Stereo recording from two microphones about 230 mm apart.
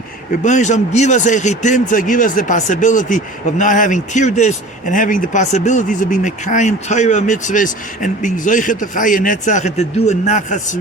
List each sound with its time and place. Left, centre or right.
0.4 s speech: left